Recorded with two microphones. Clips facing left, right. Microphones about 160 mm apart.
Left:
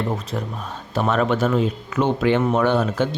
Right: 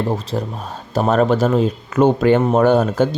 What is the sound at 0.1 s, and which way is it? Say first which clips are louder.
Speech: right 4 dB; 35° right (ahead or behind).